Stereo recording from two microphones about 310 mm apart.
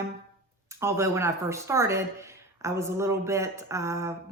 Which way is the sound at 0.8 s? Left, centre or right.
Centre.